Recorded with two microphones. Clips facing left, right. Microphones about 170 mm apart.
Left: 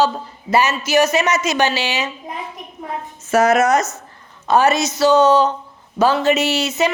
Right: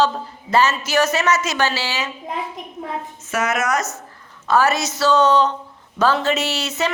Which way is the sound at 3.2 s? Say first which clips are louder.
Left 8 dB; 35° left (ahead or behind).